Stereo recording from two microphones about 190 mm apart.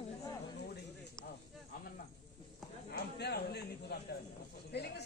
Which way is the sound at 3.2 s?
60° left (ahead or behind).